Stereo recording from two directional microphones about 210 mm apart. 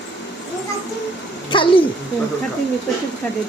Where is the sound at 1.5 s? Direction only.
25° left (ahead or behind).